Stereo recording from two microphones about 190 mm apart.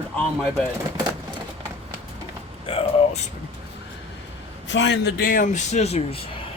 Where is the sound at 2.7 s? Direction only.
35° left (ahead or behind).